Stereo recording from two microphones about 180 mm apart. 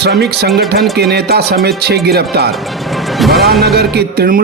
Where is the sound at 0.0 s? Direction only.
65° right (ahead or behind).